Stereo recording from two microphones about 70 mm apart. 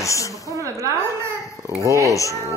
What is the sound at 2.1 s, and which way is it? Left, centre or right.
Speech, left.